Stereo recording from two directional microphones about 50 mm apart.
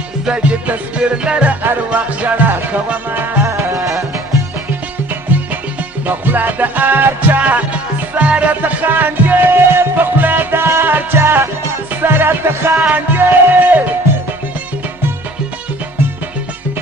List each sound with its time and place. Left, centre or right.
0.2 s music: right
3.4 s music: right
5.3 s music: right
8.5 s music: right
13.1 s music: right